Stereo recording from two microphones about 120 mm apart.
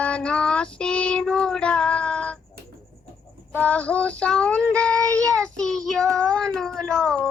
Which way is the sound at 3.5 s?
10° left (ahead or behind).